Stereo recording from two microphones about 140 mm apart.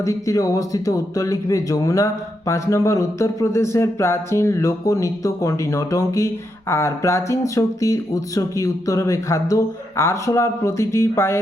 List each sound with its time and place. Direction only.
0.0 s speech: 25° left (ahead or behind)